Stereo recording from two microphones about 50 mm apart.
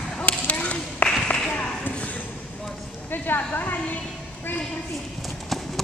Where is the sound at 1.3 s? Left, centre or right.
Centre.